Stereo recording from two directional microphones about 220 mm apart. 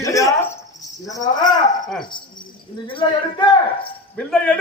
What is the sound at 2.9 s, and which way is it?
Speech, 20° left (ahead or behind).